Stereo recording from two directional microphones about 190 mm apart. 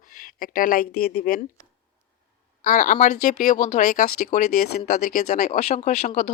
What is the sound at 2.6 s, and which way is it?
Speech, 40° left (ahead or behind).